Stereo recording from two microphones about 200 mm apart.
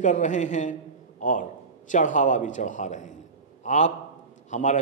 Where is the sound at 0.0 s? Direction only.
40° left (ahead or behind).